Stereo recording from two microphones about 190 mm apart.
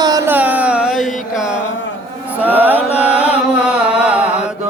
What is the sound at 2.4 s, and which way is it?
Mantra, 10° right (ahead or behind).